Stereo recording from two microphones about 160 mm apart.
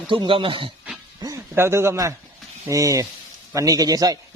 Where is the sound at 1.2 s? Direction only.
20° right (ahead or behind).